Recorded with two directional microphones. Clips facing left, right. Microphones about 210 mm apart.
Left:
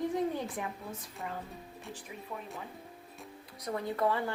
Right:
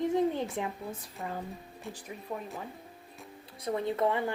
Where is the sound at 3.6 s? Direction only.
25° right (ahead or behind).